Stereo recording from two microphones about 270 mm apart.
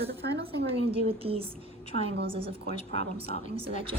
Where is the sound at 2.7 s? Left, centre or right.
Left.